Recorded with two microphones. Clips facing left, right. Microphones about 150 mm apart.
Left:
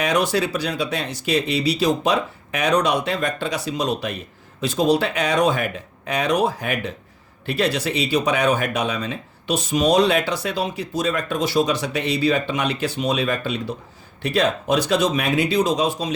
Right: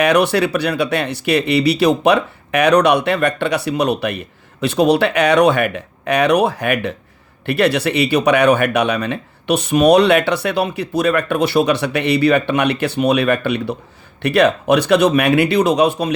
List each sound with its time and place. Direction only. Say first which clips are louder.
0.0 s speech: right 6 dB; 65° right (ahead or behind)